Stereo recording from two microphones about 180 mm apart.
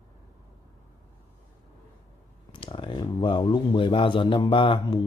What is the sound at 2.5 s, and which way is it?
Speech, 30° left (ahead or behind).